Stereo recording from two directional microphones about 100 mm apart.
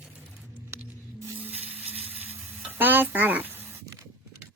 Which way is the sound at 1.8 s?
90° right.